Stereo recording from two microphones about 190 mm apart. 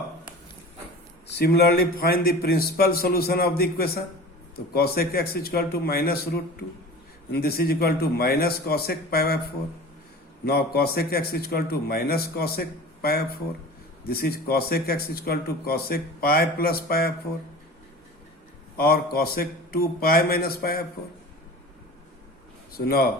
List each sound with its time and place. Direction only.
1.3 s speech: 55° left (ahead or behind)
10.4 s speech: 55° left (ahead or behind)
18.8 s speech: 55° left (ahead or behind)
22.7 s speech: 55° left (ahead or behind)